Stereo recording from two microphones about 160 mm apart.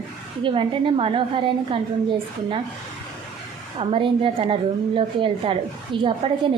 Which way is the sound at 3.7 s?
35° right (ahead or behind).